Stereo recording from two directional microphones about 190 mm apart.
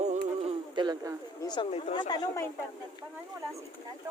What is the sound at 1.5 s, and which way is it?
Speech, 25° left (ahead or behind).